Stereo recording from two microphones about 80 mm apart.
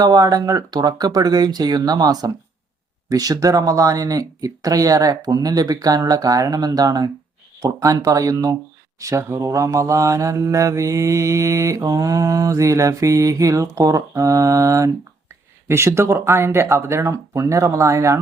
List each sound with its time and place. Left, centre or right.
0.0 s mantra: right
15.6 s speech: right